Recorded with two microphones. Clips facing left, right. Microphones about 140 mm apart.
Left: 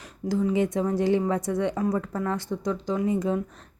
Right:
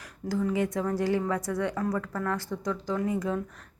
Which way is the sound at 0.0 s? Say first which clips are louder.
Left 3 dB; 20° left (ahead or behind).